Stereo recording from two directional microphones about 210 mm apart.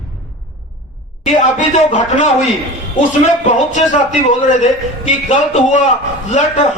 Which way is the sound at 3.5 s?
35° left (ahead or behind).